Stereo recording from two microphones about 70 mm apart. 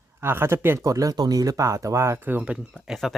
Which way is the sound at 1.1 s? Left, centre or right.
Right.